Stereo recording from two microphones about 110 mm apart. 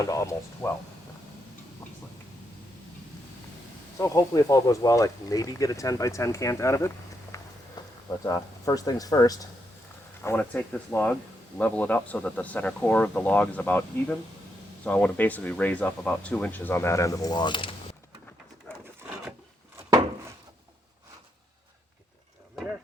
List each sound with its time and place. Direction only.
0.0 s speech: 30° left (ahead or behind)
3.9 s speech: 30° left (ahead or behind)
7.3 s a sound: 30° left (ahead or behind)
8.2 s speech: 30° left (ahead or behind)
10.3 s speech: 15° left (ahead or behind); by 17.7 s 50° left (ahead or behind)
18.7 s dog: 15° left (ahead or behind)